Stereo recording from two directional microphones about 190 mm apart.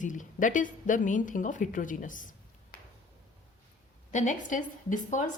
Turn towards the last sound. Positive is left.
turn(degrees=40)  # may be behind; listen again after turning